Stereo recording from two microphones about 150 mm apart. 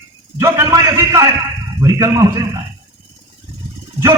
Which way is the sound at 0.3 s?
20° right (ahead or behind).